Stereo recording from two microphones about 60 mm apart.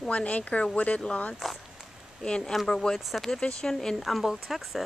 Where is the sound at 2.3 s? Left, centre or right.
Centre.